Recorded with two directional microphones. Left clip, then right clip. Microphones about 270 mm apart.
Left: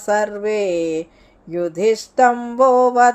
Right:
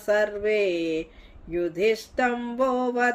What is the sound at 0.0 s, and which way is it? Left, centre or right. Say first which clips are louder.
Mantra: left 4 dB; centre.